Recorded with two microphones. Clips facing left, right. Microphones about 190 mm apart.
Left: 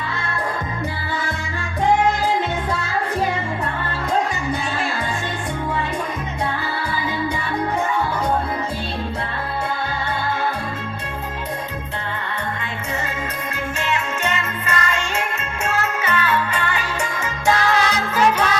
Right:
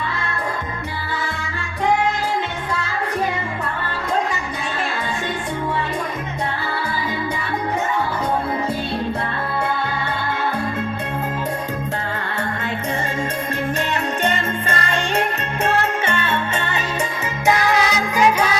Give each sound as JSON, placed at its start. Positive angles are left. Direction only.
{"t": 13.9, "sound": "music", "side_deg": -35}